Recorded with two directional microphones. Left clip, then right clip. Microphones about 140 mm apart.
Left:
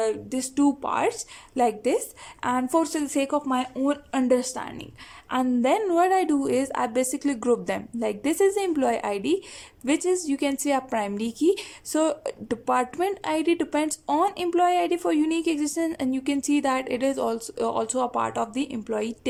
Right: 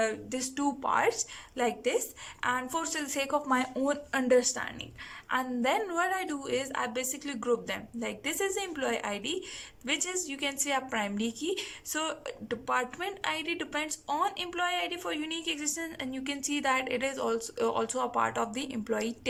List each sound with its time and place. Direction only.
0.0 s speech: 30° left (ahead or behind)
4.1 s a woman's voice: 30° left (ahead or behind)